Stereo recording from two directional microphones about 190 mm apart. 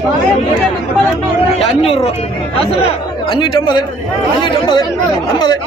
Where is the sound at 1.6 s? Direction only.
30° left (ahead or behind).